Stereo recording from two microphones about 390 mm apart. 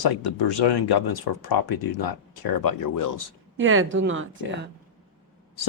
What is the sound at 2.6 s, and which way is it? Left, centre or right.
Speech, left.